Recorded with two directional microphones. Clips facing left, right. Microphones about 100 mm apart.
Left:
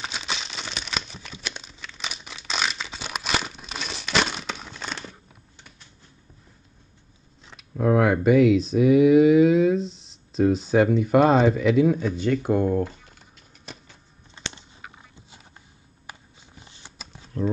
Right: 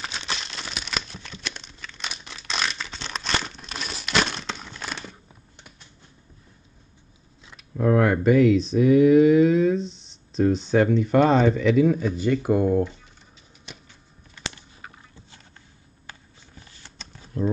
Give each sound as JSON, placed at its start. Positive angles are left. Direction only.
{"t": 0.0, "sound": "crumpling", "side_deg": 0}
{"t": 7.7, "sound": "speech", "side_deg": 5}
{"t": 13.7, "sound": "a sound", "side_deg": 35}
{"t": 14.3, "sound": "typing", "side_deg": 25}
{"t": 15.1, "sound": "a sound", "side_deg": 15}
{"t": 16.1, "sound": "shuffling cards", "side_deg": 20}